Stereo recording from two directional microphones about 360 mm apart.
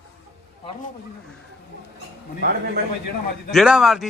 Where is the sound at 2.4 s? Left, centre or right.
Right.